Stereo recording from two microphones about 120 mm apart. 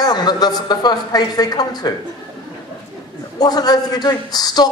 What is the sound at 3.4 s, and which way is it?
A woman's voice, 35° left (ahead or behind).